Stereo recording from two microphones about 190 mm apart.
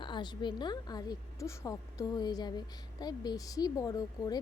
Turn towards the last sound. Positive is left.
turn(degrees=20)  # may be behind; listen again after turning